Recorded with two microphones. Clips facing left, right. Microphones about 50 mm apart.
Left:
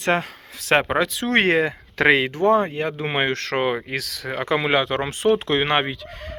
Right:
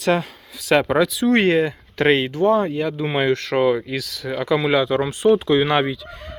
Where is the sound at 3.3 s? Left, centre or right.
Left.